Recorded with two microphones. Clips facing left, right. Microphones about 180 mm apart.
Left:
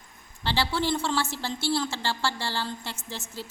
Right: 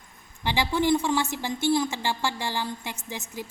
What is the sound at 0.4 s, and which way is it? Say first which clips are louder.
A woman's voice: right 3 dB; 15° right (ahead or behind).